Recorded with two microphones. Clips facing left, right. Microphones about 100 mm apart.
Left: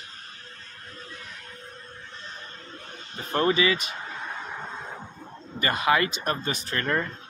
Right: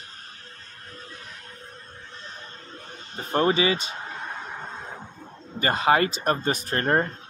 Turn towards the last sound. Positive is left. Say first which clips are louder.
# right 4 dB
turn(degrees=-40)  # may be behind; listen again after turning